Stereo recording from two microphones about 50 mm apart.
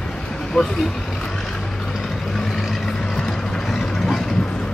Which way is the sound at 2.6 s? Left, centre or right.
Centre.